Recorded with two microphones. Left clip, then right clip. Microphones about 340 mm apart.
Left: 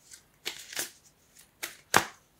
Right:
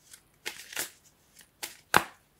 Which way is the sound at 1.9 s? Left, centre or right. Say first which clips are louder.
Even; centre.